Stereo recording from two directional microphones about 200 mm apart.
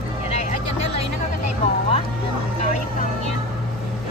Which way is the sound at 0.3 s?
35° left (ahead or behind).